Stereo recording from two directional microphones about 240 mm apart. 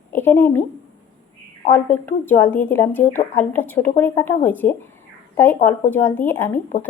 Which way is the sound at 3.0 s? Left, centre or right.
Left.